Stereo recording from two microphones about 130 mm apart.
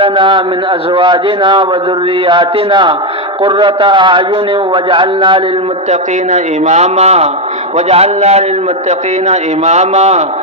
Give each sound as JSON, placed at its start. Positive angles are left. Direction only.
{"t": 0.0, "sound": "a man's voice", "side_deg": -40}
{"t": 5.9, "sound": "a man's voice", "side_deg": -60}